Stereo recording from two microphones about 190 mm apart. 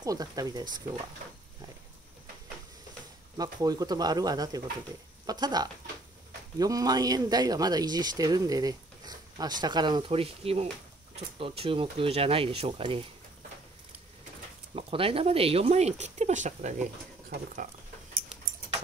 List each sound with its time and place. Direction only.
0.0 s speech: 20° right (ahead or behind)
3.3 s speech: 20° right (ahead or behind)
14.8 s speech: 30° right (ahead or behind)